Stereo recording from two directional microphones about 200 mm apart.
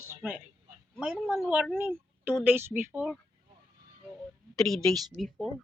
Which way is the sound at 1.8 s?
10° right (ahead or behind).